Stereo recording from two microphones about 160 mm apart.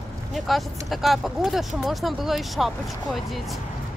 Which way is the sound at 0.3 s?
Centre (ahead or behind).